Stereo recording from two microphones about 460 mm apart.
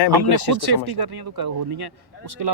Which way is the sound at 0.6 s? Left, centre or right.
Right.